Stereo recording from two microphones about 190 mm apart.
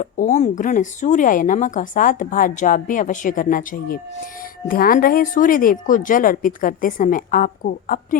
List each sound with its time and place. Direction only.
0.0 s speech: 40° left (ahead or behind)